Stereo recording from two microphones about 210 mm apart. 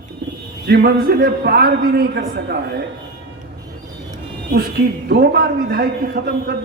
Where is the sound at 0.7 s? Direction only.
45° right (ahead or behind).